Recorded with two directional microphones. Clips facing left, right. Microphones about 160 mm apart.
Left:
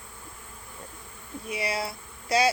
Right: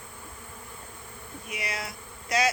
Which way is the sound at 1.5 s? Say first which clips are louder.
Left 6 dB; 30° left (ahead or behind).